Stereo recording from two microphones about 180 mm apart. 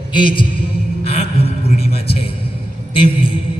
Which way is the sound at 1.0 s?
35° left (ahead or behind).